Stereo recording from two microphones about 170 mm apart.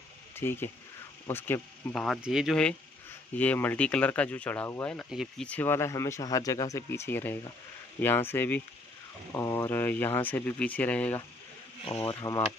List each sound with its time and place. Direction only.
0.4 s speech: 15° left (ahead or behind)
5.1 s speech: centre (ahead or behind)
5.5 s speech: 15° left (ahead or behind)
11.8 s speech: 35° left (ahead or behind)
12.2 s speech: 20° left (ahead or behind)